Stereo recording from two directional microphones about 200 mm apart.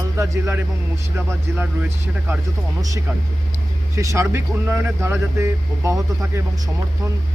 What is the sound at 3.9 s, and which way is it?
Speech, 15° right (ahead or behind).